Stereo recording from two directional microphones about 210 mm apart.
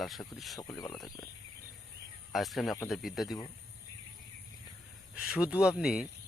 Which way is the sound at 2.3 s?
Centre (ahead or behind).